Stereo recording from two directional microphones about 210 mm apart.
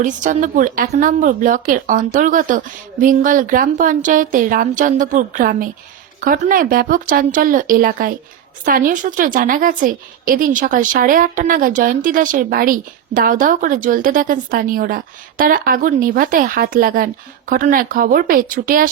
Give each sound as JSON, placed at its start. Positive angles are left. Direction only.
{"t": 0.0, "sound": "a woman's voice", "side_deg": -40}